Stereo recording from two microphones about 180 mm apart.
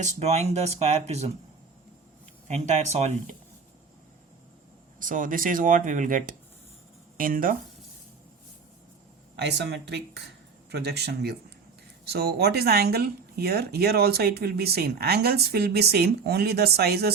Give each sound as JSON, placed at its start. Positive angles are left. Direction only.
{"t": 0.0, "sound": "speech", "side_deg": -35}
{"t": 2.5, "sound": "speech", "side_deg": -40}
{"t": 4.9, "sound": "speech", "side_deg": -45}
{"t": 9.3, "sound": "speech", "side_deg": -70}